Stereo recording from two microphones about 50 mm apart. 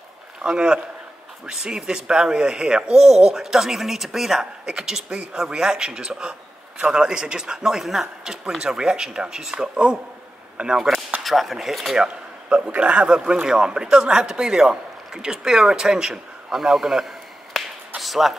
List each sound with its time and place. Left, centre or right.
0.4 s a man's voice: centre
11.2 s speech: centre
12.0 s a man's voice: centre